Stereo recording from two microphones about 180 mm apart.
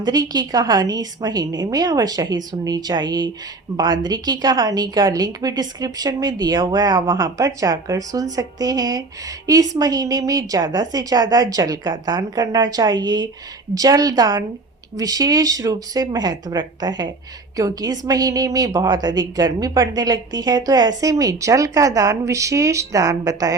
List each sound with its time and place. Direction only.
0.0 s a woman's voice: 20° right (ahead or behind)